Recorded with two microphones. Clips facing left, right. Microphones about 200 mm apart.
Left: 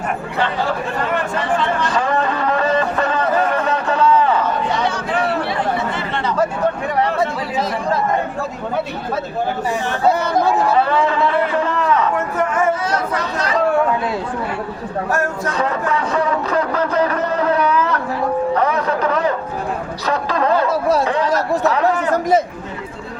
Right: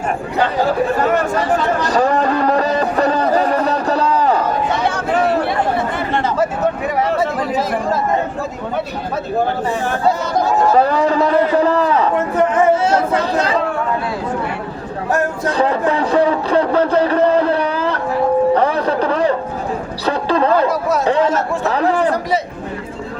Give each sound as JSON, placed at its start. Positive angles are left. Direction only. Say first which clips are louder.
{"t": 0.9, "sound": "music", "louder": "right 5 dB", "side_deg": -45}
{"t": 4.9, "sound": "chatter", "louder": "right 4 dB", "side_deg": -50}
{"t": 10.8, "sound": "speech", "louder": "right 3 dB", "side_deg": -40}
{"t": 15.2, "sound": "speech", "louder": "right 3 dB", "side_deg": -35}
{"t": 18.5, "sound": "a sound", "louder": "right 3 dB", "side_deg": -30}
{"t": 20.1, "sound": "speech", "louder": "right 3 dB", "side_deg": -30}
{"t": 21.2, "sound": "speech", "louder": "right 2 dB", "side_deg": 35}
{"t": 21.6, "sound": "speech", "louder": "right 1 dB", "side_deg": -35}